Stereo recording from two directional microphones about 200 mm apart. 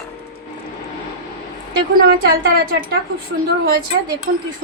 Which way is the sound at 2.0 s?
50° right (ahead or behind).